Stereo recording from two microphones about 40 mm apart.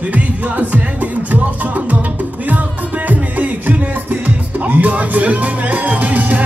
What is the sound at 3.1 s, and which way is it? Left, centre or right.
Music, right.